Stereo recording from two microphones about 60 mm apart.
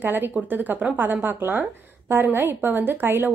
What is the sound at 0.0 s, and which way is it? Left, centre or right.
Speech, right.